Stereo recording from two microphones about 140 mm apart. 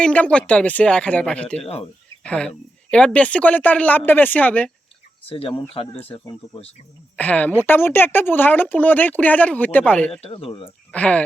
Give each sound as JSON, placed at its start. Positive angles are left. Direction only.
{"t": 0.0, "sound": "a woman's voice", "side_deg": 10}
{"t": 1.5, "sound": "speech", "side_deg": 45}
{"t": 2.2, "sound": "a woman's voice", "side_deg": 10}
{"t": 5.2, "sound": "speech", "side_deg": 40}
{"t": 7.2, "sound": "a woman's voice", "side_deg": 10}
{"t": 10.1, "sound": "speech", "side_deg": 40}
{"t": 10.9, "sound": "a woman's voice", "side_deg": 10}